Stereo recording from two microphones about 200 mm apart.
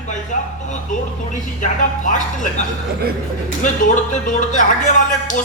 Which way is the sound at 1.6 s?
40° left (ahead or behind).